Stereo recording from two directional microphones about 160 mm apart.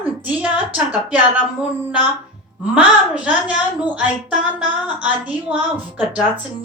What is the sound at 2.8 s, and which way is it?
A woman's voice, 10° right (ahead or behind).